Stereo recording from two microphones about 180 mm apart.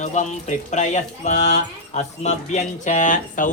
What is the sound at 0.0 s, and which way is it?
Music, 40° left (ahead or behind).